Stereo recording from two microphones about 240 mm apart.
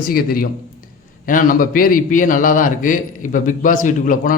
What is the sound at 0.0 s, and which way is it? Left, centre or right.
Speech, left.